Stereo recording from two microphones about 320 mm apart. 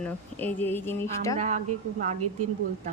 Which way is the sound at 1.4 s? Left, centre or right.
Right.